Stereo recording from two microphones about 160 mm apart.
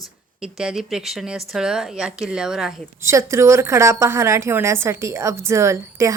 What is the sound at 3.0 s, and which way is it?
A woman's voice, 15° right (ahead or behind).